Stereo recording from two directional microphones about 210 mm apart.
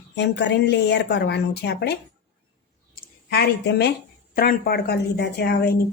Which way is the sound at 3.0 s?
50° left (ahead or behind).